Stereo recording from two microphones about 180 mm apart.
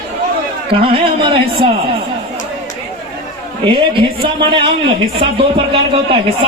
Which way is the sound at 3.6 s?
30° right (ahead or behind).